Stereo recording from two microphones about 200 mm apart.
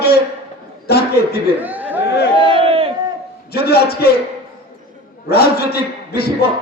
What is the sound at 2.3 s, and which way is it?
Crowd, 25° left (ahead or behind).